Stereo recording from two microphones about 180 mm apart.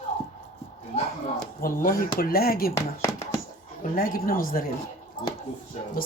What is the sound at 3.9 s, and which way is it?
Speech, 50° left (ahead or behind).